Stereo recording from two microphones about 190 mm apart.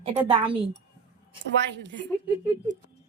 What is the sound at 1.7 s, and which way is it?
Speech, 70° right (ahead or behind).